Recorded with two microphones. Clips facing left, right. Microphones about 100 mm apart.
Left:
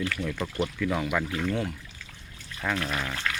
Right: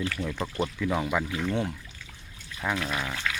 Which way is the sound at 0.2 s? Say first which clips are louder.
Even; 20° right (ahead or behind).